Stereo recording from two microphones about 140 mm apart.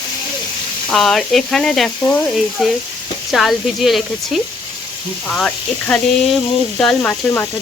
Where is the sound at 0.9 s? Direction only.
5° left (ahead or behind).